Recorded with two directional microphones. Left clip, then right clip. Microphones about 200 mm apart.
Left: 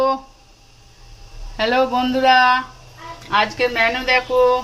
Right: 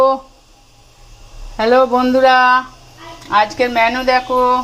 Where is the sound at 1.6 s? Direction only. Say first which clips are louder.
Right 6 dB; centre (ahead or behind).